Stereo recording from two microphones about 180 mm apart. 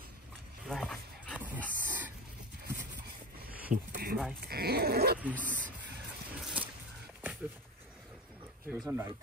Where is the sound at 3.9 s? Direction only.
60° right (ahead or behind).